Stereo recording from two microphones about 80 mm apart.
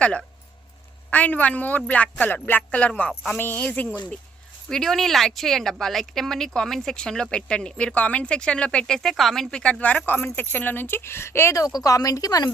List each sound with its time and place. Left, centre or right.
0.0 s speech: centre
4.7 s speech: centre; by 11.5 s left
11.8 s speech: left